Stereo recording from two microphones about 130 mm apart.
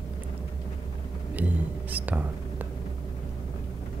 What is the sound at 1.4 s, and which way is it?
Whispering, 15° right (ahead or behind).